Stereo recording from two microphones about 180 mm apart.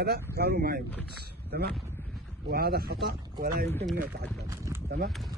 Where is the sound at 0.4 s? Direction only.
55° right (ahead or behind).